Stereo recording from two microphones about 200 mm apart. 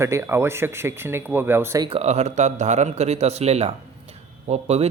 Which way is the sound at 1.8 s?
30° right (ahead or behind).